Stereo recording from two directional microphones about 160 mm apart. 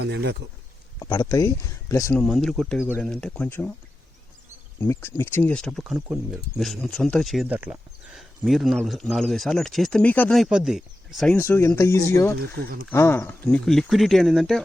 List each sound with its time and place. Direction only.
0.0 s speech: 90° right
0.9 s speech: 25° left (ahead or behind)
2.1 s speech: centre (ahead or behind)
4.8 s speech: 15° left (ahead or behind); by 11.3 s centre (ahead or behind)
11.3 s speech: 15° left (ahead or behind)